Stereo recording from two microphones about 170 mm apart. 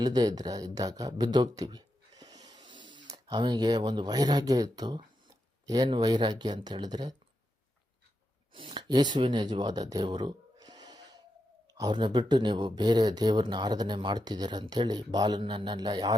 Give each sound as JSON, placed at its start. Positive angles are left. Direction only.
{"t": 0.0, "sound": "a sound", "side_deg": -20}
{"t": 3.1, "sound": "speech", "side_deg": -25}
{"t": 8.5, "sound": "speech", "side_deg": -30}